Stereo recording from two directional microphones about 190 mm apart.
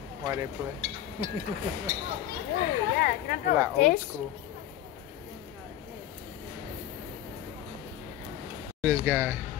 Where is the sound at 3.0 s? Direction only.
50° left (ahead or behind).